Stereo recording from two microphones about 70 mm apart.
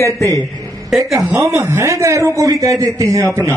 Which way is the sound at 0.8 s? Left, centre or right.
Centre.